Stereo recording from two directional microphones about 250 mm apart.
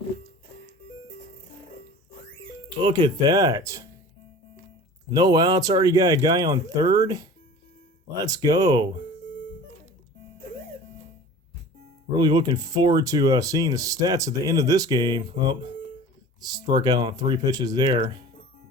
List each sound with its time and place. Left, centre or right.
2.8 s speech: centre
5.1 s speech: centre
12.1 s speech: centre